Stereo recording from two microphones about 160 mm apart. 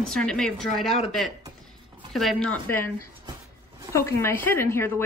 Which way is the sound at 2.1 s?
5° left (ahead or behind).